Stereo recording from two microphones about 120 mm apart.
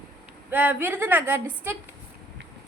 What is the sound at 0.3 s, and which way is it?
A woman's voice, 15° right (ahead or behind).